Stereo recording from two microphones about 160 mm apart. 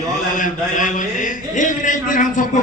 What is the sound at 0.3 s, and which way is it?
A man's voice, 55° left (ahead or behind).